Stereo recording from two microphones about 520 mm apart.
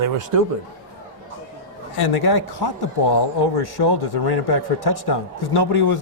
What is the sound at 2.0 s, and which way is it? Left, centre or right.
Speech, left.